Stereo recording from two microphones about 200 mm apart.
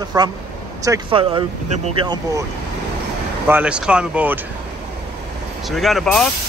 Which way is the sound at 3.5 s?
5° right (ahead or behind).